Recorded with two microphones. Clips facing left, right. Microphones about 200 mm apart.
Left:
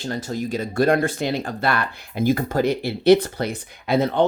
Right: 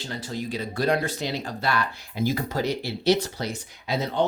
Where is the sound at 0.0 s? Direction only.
45° left (ahead or behind).